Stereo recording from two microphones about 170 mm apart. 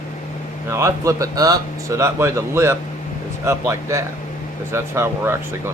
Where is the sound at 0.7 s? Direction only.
15° right (ahead or behind).